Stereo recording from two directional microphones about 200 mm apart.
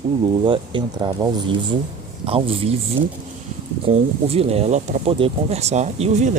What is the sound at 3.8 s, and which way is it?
Speech, 30° right (ahead or behind).